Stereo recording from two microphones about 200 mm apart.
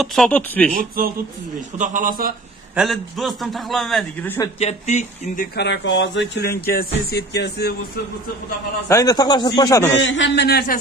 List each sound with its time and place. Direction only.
0.0 s a man's voice: centre (ahead or behind)
0.7 s a man's voice: 45° right (ahead or behind)
2.7 s a man's voice: centre (ahead or behind)
4.6 s speech: 35° left (ahead or behind)
5.6 s speech: 65° left (ahead or behind)
8.8 s a man's voice: 15° left (ahead or behind)
9.9 s speech: 65° left (ahead or behind)